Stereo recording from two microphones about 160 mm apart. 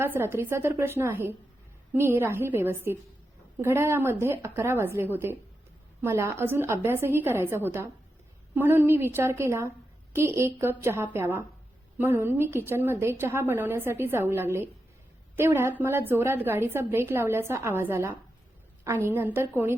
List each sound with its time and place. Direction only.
0.0 s a woman's voice: 15° right (ahead or behind)